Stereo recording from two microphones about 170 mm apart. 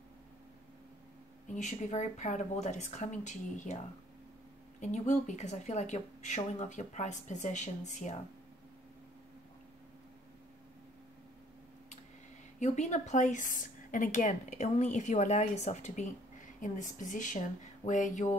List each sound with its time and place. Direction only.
1.5 s a woman's voice: 45° left (ahead or behind)
4.7 s a woman's voice: 45° left (ahead or behind)
12.5 s a woman's voice: 45° left (ahead or behind)